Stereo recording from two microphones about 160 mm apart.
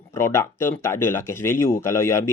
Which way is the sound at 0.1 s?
15° left (ahead or behind).